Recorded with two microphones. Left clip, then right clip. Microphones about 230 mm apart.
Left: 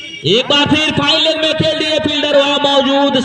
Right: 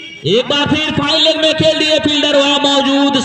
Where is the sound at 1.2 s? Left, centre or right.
Centre; by 3.2 s right.